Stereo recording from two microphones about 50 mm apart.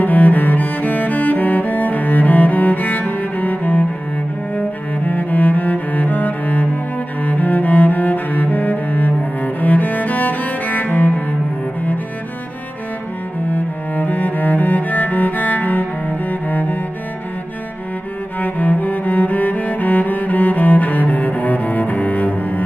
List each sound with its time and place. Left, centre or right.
0.0 s cello: left
13.5 s cello: left
18.4 s cello: left